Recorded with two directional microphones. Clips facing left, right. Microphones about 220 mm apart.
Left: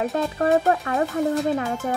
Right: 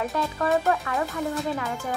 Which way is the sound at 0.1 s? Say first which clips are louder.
Left 4 dB; 40° left (ahead or behind).